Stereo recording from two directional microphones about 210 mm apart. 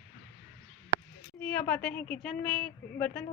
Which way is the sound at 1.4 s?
5° left (ahead or behind).